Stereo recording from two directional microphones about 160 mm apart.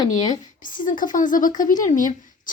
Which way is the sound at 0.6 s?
55° left (ahead or behind).